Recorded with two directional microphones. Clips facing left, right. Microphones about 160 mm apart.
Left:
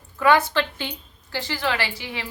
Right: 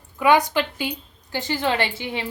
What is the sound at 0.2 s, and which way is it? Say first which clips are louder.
A woman's voice: right 1 dB; 15° right (ahead or behind).